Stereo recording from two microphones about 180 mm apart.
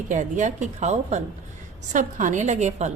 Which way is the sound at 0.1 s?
45° right (ahead or behind).